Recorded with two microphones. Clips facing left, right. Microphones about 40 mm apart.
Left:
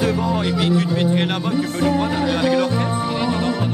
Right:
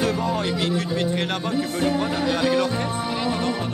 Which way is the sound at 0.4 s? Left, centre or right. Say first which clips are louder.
Left 5 dB; centre.